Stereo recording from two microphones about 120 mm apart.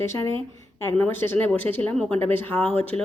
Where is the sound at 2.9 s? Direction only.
65° right (ahead or behind).